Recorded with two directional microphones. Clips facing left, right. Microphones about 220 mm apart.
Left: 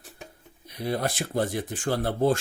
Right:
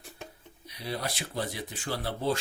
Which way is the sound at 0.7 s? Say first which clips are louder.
Left 7 dB; 50° left (ahead or behind).